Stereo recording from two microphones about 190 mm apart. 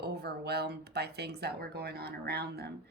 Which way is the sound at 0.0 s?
60° right (ahead or behind).